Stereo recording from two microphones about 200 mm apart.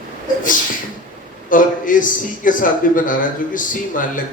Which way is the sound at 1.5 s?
40° left (ahead or behind).